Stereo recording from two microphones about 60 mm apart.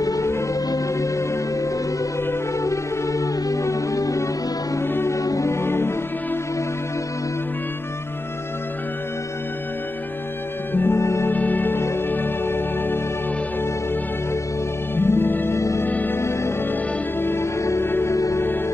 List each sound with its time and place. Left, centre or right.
0.0 s music: left
4.8 s music: left
5.1 s music: left
5.5 s music: left
10.7 s music: left
11.0 s music: left
11.2 s music: left
11.8 s music: left
15.0 s music: left
16.2 s music: left
18.1 s music: left